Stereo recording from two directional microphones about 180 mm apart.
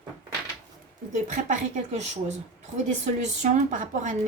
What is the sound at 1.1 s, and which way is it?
A woman's voice, 45° right (ahead or behind).